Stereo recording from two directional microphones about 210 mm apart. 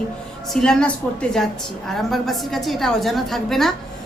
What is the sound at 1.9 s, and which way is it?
A woman's voice, centre (ahead or behind).